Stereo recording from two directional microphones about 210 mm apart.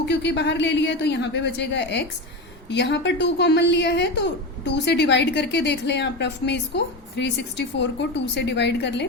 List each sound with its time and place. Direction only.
0.0 s a woman's voice: 55° left (ahead or behind)